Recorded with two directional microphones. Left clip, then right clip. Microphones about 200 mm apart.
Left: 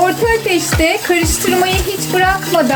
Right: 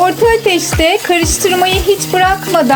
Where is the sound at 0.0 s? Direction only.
40° right (ahead or behind).